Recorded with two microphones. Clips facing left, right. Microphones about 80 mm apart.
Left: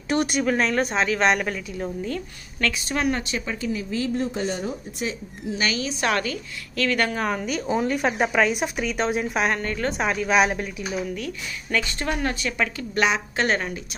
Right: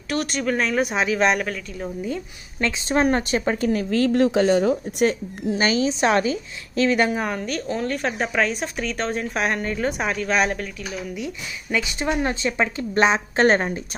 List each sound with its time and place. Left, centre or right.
0.1 s speech: left
0.4 s speech: centre
2.0 s a woman's voice: centre
2.9 s a woman's voice: right
5.6 s a woman's voice: right
7.2 s speech: centre
11.1 s a woman's voice: centre; by 13.7 s right